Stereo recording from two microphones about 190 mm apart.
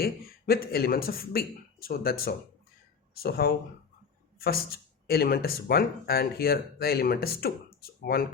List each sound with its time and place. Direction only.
0.0 s speech: 55° left (ahead or behind)